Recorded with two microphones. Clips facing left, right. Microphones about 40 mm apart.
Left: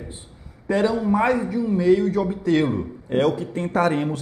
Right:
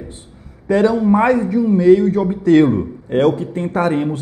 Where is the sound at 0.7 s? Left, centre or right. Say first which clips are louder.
Right 6 dB; right.